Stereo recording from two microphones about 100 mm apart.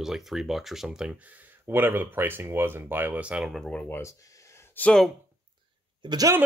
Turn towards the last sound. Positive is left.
turn(degrees=-40)  # may be behind; listen again after turning